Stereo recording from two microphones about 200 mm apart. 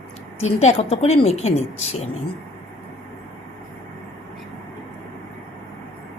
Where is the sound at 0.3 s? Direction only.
35° left (ahead or behind).